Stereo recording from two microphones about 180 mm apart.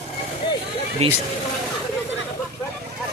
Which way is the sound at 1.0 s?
35° right (ahead or behind).